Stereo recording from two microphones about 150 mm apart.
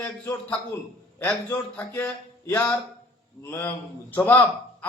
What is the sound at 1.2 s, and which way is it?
A man's voice, 15° left (ahead or behind).